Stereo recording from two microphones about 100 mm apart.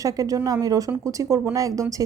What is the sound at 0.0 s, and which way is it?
Speech, 35° right (ahead or behind).